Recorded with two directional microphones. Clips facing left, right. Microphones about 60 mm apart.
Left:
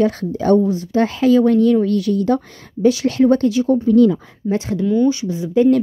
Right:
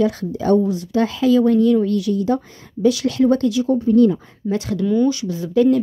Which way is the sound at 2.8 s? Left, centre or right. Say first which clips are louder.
Left 2 dB; left.